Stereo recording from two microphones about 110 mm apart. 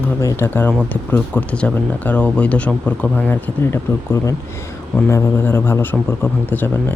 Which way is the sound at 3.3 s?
20° left (ahead or behind).